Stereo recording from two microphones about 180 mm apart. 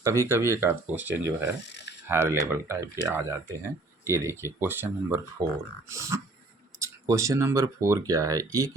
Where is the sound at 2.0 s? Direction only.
15° right (ahead or behind).